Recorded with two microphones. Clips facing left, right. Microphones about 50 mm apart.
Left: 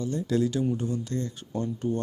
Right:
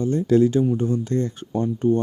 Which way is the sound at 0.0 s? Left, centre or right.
Right.